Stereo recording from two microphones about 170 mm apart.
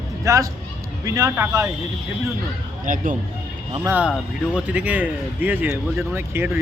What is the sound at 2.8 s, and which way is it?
Speech, 50° right (ahead or behind).